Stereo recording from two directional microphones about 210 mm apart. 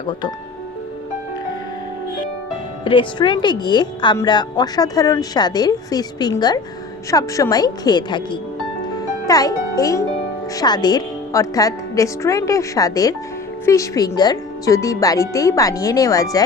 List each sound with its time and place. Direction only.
2.8 s a woman's voice: 25° left (ahead or behind)
9.0 s music: 15° left (ahead or behind)
10.5 s a woman's voice: 20° left (ahead or behind)